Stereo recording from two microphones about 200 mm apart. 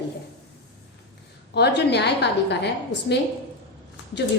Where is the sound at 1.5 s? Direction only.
55° left (ahead or behind).